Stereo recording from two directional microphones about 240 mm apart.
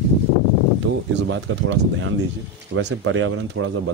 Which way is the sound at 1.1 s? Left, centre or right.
Right.